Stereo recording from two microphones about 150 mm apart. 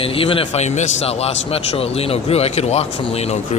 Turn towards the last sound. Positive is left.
turn(degrees=45)  # may be behind; listen again after turning